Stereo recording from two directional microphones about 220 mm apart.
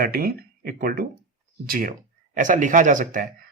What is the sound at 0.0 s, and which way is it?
Speech, 45° right (ahead or behind).